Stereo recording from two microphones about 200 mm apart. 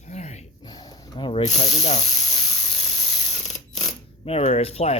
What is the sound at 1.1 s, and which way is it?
Ratchet, 25° left (ahead or behind).